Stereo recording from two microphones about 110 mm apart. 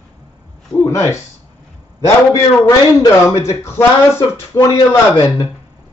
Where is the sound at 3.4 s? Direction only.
25° left (ahead or behind).